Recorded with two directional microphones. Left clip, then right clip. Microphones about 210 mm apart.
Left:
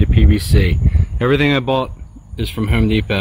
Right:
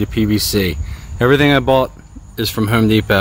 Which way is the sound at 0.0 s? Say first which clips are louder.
Right 2 dB; 5° right (ahead or behind).